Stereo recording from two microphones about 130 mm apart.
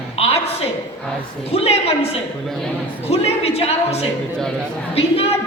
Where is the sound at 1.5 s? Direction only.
50° left (ahead or behind).